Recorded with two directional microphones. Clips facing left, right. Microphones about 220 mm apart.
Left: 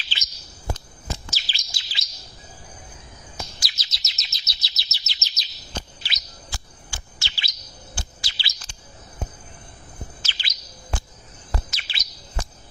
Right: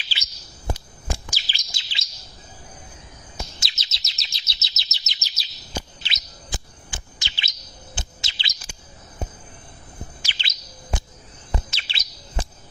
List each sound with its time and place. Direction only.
0.7 s bird: 15° right (ahead or behind)
3.6 s chirp: 25° right (ahead or behind); by 5.8 s 10° right (ahead or behind)
6.0 s chirp: 20° right (ahead or behind)
10.3 s bird: 25° right (ahead or behind)
11.5 s chirp: 25° right (ahead or behind)